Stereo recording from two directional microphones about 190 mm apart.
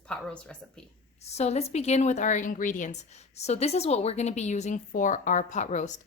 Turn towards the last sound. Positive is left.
turn(degrees=40)  # may be behind; listen again after turning